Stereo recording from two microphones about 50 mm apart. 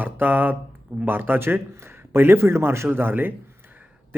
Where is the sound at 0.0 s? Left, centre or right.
Right.